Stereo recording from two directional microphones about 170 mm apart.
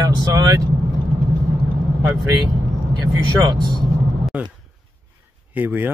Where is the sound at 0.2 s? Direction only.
20° right (ahead or behind).